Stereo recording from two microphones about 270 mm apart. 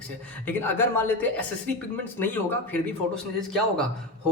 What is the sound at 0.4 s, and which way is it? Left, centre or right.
A man's voice, centre.